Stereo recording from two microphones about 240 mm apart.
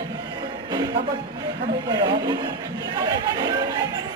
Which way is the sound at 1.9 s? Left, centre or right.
Centre.